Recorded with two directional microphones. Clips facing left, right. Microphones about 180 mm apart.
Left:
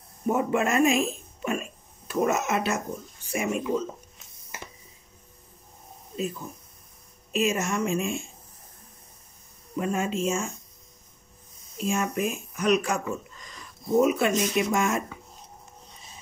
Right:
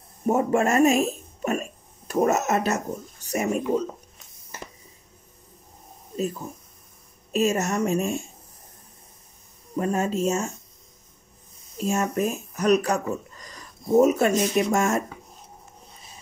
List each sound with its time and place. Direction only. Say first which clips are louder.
0.3 s speech: right 3 dB; 45° right (ahead or behind)
7.3 s speech: right 3 dB; 40° right (ahead or behind)
9.8 s speech: right 3 dB; 40° right (ahead or behind)
11.8 s speech: right 3 dB; 40° right (ahead or behind)